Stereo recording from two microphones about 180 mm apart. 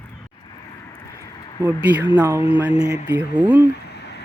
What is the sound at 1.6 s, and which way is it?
Speech, 10° right (ahead or behind).